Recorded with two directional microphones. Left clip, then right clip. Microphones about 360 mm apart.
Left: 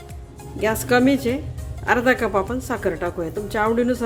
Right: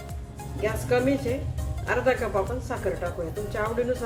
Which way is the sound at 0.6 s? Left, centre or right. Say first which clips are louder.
Left 6 dB; left.